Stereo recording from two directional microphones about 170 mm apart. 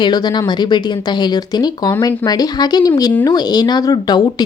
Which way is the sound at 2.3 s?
20° left (ahead or behind).